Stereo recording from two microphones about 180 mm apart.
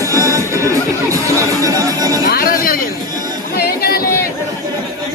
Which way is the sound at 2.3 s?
50° left (ahead or behind).